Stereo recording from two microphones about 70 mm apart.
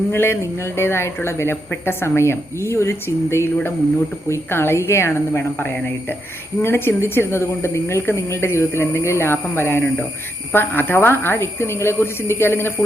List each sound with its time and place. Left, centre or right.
0.1 s speech: left